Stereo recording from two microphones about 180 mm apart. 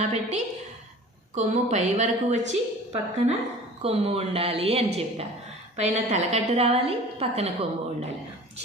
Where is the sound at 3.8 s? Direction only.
35° right (ahead or behind).